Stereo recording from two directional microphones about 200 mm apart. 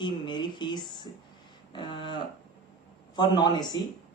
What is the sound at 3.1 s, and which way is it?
Speech, 20° left (ahead or behind).